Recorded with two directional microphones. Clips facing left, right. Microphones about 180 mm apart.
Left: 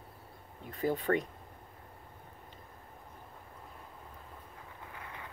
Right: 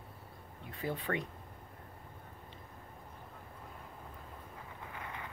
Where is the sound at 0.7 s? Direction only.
40° left (ahead or behind).